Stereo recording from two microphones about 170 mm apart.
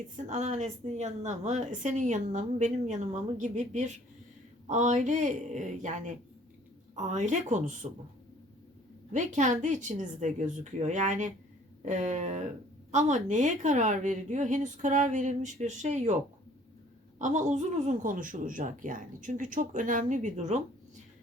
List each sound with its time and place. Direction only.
0.2 s a woman's voice: 45° right (ahead or behind)
9.1 s a woman's voice: 45° right (ahead or behind)
17.2 s a woman's voice: 45° right (ahead or behind)